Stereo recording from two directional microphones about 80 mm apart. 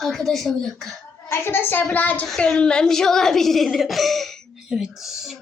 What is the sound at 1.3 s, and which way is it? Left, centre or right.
Speech, left.